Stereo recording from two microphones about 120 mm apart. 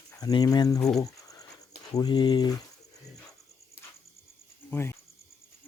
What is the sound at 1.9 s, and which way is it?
Speech, 35° left (ahead or behind).